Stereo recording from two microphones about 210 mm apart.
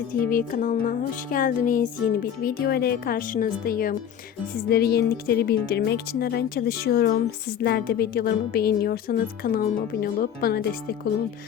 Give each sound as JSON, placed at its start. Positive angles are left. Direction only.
{"t": 0.3, "sound": "music", "side_deg": 40}
{"t": 4.5, "sound": "a woman's voice", "side_deg": 50}